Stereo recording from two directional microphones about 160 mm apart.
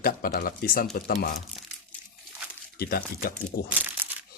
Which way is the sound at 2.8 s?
70° left (ahead or behind).